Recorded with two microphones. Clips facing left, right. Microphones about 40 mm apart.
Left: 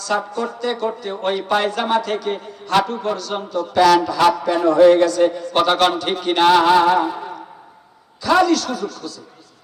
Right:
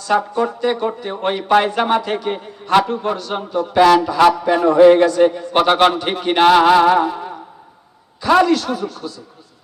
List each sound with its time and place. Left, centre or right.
0.0 s speech: right
8.2 s speech: right